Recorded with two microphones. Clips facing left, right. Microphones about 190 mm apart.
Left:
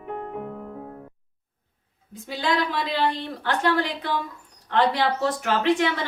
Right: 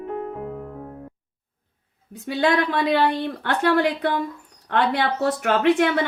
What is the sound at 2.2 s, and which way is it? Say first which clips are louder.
A woman's voice: right 5 dB; 60° right (ahead or behind).